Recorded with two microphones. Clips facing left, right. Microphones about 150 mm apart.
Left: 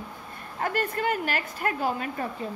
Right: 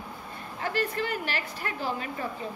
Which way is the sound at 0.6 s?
50° left (ahead or behind).